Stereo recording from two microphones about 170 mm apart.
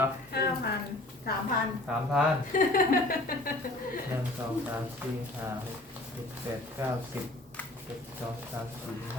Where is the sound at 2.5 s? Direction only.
55° left (ahead or behind).